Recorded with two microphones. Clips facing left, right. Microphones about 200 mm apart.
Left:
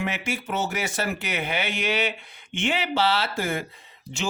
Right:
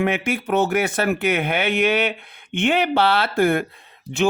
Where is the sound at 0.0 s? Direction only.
55° right (ahead or behind).